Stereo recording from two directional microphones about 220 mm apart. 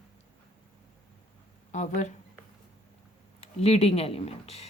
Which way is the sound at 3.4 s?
30° left (ahead or behind).